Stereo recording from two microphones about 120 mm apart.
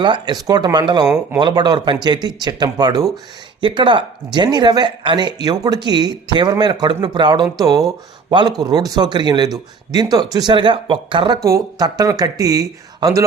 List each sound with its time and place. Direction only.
0.0 s speech: 40° right (ahead or behind)
3.6 s speech: 45° right (ahead or behind)
11.4 s speech: 30° right (ahead or behind)